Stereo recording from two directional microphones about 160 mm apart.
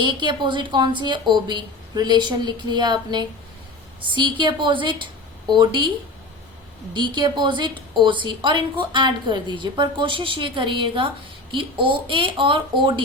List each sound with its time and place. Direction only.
0.0 s a woman's voice: 30° right (ahead or behind)
6.9 s a woman's voice: 30° right (ahead or behind)